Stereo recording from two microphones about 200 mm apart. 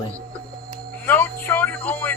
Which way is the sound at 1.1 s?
10° left (ahead or behind).